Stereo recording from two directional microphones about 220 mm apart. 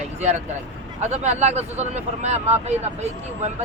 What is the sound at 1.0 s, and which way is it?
Speech, 30° right (ahead or behind).